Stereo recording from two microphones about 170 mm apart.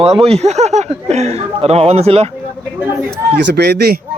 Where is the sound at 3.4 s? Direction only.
75° right (ahead or behind).